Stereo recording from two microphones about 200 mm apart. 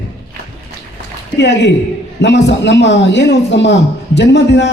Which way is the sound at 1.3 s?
60° left (ahead or behind).